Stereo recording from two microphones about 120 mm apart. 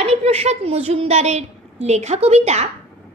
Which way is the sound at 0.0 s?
60° right (ahead or behind).